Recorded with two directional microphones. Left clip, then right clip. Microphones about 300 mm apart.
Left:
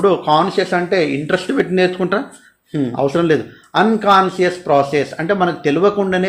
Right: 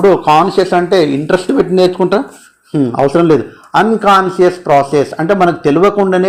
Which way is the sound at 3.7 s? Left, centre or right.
Centre.